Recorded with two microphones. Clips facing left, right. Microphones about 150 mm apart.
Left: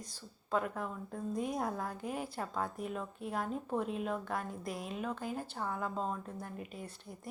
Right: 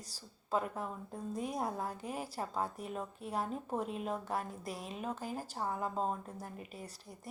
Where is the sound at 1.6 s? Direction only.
25° right (ahead or behind).